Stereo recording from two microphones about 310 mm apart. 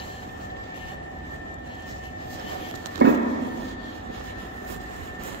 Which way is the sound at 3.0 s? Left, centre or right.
Right.